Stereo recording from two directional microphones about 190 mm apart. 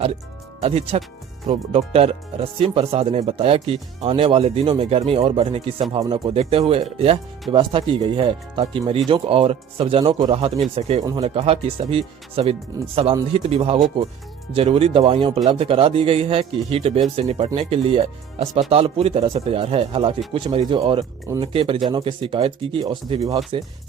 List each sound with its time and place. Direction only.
0.6 s speech: 30° right (ahead or behind)
12.7 s speech: 15° right (ahead or behind)
13.3 s speech: 35° right (ahead or behind)